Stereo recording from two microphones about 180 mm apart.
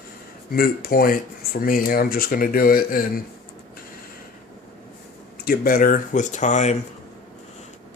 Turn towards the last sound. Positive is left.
turn(degrees=40)  # may be behind; listen again after turning